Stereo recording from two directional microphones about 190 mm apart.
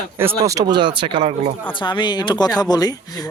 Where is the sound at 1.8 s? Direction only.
25° left (ahead or behind).